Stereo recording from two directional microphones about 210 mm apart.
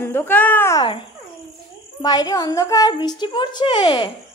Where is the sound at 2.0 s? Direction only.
15° left (ahead or behind).